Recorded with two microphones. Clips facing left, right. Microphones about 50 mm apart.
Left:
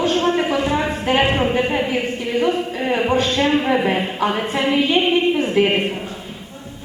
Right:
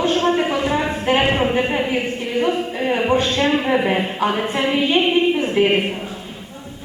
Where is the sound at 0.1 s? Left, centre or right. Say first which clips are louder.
Even; centre.